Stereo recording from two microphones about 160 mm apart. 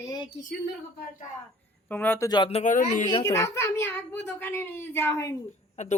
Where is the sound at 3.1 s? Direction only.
25° left (ahead or behind).